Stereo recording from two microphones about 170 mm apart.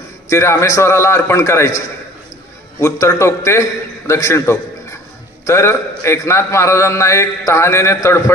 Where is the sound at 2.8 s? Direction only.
15° left (ahead or behind).